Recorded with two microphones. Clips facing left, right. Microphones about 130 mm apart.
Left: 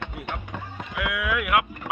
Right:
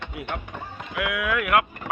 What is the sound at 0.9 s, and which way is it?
Boat, centre (ahead or behind).